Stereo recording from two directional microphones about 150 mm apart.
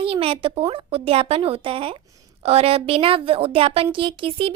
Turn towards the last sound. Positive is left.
turn(degrees=-40)  # may be behind; listen again after turning